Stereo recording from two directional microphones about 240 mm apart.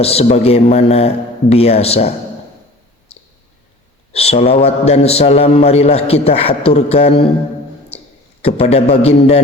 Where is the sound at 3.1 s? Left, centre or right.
Left.